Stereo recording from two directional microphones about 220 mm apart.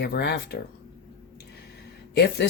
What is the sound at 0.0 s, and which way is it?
Speech, 50° left (ahead or behind).